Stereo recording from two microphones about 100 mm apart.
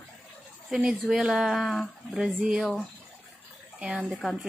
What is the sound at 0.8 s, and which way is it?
Speech, 5° right (ahead or behind).